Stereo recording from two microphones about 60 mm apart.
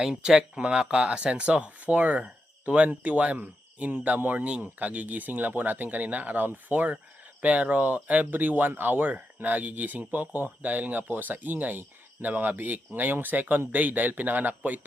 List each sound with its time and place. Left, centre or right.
0.0 s speech: centre; by 14.8 s right